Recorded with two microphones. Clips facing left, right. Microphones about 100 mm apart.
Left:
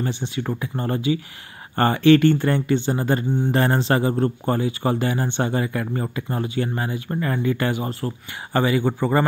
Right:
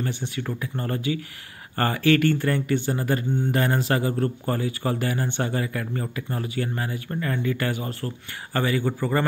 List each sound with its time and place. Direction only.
0.0 s a man's voice: 20° left (ahead or behind)